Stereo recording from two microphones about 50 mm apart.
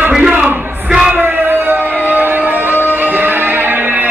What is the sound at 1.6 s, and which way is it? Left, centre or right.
Music, right.